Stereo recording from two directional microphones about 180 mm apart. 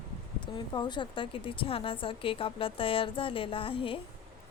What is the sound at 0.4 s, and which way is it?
Speech, 25° left (ahead or behind).